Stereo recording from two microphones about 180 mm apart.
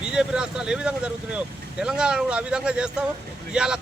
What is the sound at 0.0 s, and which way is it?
Speech, 5° right (ahead or behind).